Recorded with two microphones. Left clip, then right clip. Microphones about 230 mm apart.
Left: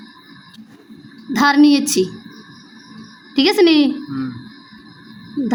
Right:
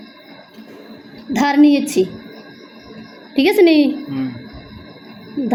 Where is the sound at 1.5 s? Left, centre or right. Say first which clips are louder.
Even; left.